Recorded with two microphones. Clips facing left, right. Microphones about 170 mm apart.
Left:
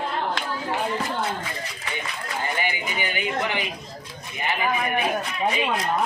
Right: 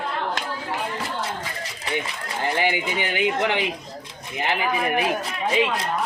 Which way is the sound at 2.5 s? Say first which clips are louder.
Right 4 dB; 80° right.